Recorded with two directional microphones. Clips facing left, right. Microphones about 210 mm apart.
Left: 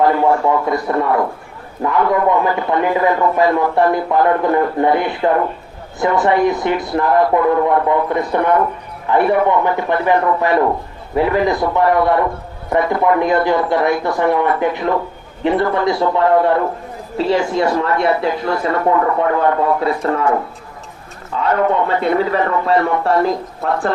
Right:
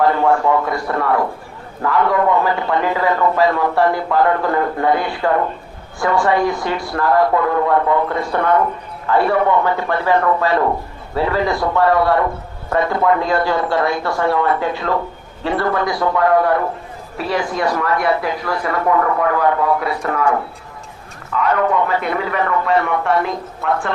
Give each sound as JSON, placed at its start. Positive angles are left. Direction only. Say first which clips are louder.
{"t": 0.0, "sound": "speech", "louder": "left 1 dB", "side_deg": 20}
{"t": 21.3, "sound": "a man's voice", "louder": "left 1 dB", "side_deg": 30}